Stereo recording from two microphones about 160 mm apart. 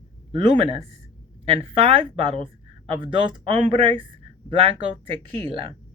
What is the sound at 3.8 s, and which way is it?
Speech, 35° right (ahead or behind).